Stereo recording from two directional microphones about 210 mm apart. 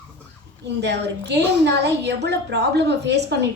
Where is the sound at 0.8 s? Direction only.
55° right (ahead or behind).